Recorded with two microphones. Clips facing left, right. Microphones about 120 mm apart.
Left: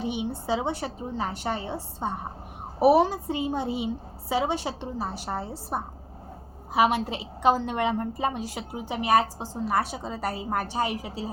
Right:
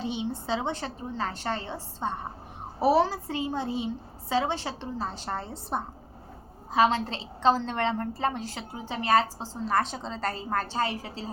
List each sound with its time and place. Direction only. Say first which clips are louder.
0.0 s a woman's voice: left 2 dB; 15° left (ahead or behind)